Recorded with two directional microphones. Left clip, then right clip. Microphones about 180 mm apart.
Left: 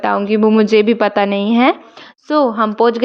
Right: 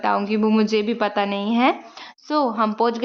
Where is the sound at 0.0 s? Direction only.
25° left (ahead or behind).